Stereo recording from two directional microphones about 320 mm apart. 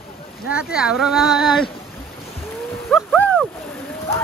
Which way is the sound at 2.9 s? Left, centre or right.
Centre.